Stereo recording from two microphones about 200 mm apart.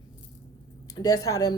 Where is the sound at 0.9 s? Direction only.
20° left (ahead or behind).